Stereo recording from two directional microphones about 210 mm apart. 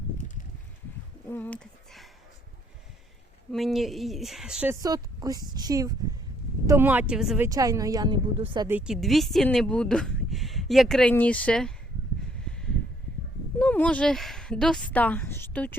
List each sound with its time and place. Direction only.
1.3 s a sound: 5° left (ahead or behind)
3.5 s a woman's voice: centre (ahead or behind)
7.4 s a woman's voice: 15° right (ahead or behind)
8.6 s speech: 5° right (ahead or behind)
12.5 s a sound: 5° left (ahead or behind)
13.6 s speech: 5° left (ahead or behind)